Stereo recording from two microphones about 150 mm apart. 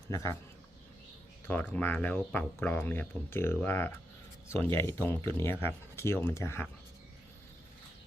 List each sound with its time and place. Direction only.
0.1 s a man's voice: 20° left (ahead or behind)
1.5 s speech: 10° left (ahead or behind)